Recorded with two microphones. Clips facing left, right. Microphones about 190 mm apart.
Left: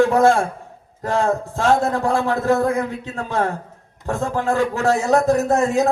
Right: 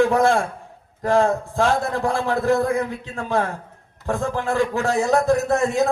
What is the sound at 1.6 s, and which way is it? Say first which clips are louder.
Speech: left 2 dB; 40° left (ahead or behind).